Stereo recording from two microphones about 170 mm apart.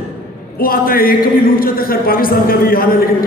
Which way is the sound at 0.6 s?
60° left (ahead or behind).